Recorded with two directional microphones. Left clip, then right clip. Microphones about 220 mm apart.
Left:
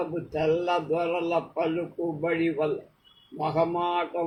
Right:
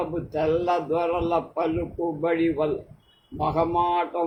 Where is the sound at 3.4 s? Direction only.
15° right (ahead or behind).